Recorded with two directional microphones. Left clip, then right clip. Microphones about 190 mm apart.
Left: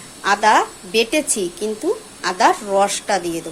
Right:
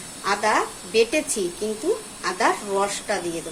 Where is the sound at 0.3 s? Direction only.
45° left (ahead or behind).